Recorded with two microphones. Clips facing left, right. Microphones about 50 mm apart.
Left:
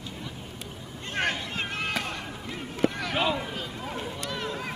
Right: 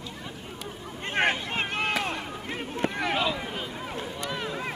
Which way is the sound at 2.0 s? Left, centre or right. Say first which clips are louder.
Right 3 dB; right.